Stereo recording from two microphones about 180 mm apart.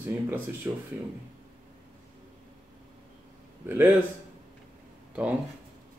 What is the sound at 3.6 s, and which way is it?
Speech, 10° right (ahead or behind).